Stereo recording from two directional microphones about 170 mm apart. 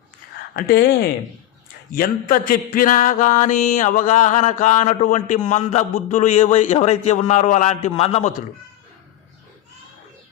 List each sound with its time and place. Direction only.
0.5 s speech: 70° left (ahead or behind)
1.9 s mantra: 55° left (ahead or behind); by 8.3 s 35° left (ahead or behind)